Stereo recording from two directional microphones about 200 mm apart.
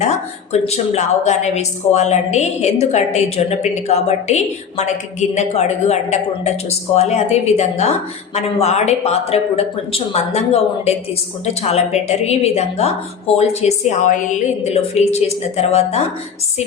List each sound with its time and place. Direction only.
0.5 s a woman's voice: 35° left (ahead or behind)